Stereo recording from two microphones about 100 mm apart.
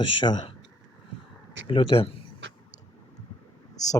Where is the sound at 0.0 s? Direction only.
60° left (ahead or behind).